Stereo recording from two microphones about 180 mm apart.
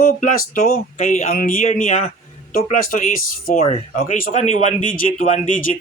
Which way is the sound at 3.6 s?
35° left (ahead or behind).